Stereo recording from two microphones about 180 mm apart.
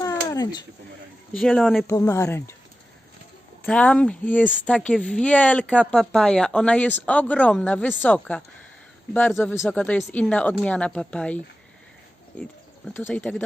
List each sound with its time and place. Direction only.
0.0 s a sound: 20° left (ahead or behind)
1.3 s speech: 5° left (ahead or behind)
1.9 s speech: 15° left (ahead or behind)
3.6 s speech: 5° left (ahead or behind)
9.6 s speech: 5° left (ahead or behind)